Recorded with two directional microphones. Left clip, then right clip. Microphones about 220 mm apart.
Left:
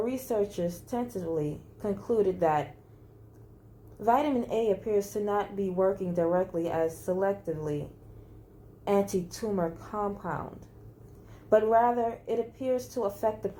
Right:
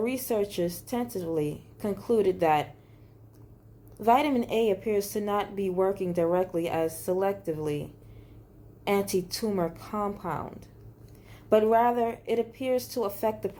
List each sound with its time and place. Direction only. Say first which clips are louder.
0.0 s a woman's voice: right 1 dB; 35° right (ahead or behind)
3.9 s a woman's voice: right 3 dB; 35° right (ahead or behind)
8.8 s a woman's voice: even; 30° right (ahead or behind)
11.4 s a woman's voice: right 1 dB; 35° right (ahead or behind)